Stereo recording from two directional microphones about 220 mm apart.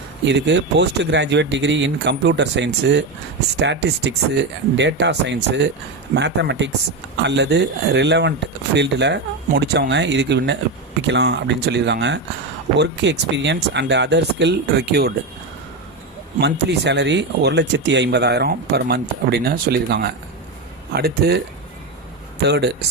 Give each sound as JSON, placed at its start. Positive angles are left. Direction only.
{"t": 0.3, "sound": "speech", "side_deg": -55}
{"t": 16.4, "sound": "speech", "side_deg": -50}
{"t": 22.4, "sound": "speech", "side_deg": -50}